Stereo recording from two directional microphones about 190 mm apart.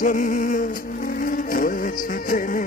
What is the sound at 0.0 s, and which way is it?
Music, 45° left (ahead or behind).